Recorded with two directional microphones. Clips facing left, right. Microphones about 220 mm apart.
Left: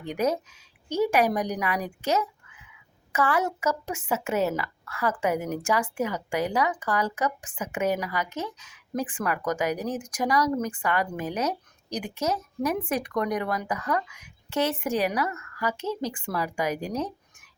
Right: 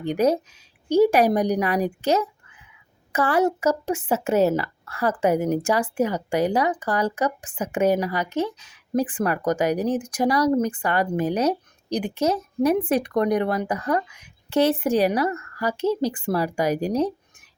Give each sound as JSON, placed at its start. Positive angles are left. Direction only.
{"t": 0.0, "sound": "speech", "side_deg": -30}